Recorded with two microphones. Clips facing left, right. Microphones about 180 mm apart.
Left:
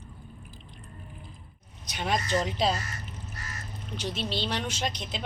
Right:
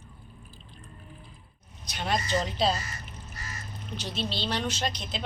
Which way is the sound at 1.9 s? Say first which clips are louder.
Left 1 dB; 15° left (ahead or behind).